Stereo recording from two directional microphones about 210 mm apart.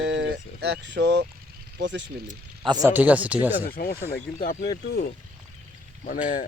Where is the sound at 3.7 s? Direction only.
45° left (ahead or behind).